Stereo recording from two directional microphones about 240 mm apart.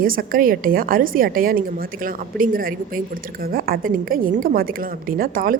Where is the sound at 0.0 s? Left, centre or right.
Right.